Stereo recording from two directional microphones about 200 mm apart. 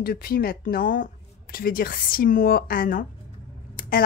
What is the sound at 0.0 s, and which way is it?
A woman's voice, 50° left (ahead or behind).